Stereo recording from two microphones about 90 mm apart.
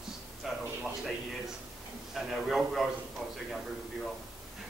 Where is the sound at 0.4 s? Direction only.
Centre (ahead or behind).